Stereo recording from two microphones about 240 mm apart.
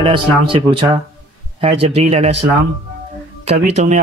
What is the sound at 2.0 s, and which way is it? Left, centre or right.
Speech, right.